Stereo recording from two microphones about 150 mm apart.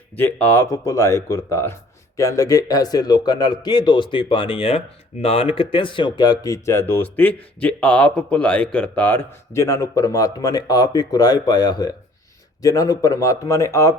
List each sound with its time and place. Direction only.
0.2 s speech: 10° left (ahead or behind)